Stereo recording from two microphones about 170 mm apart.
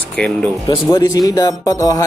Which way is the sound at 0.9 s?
20° left (ahead or behind).